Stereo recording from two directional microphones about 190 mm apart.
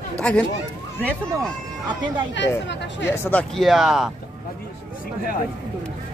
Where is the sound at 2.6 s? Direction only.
65° left (ahead or behind).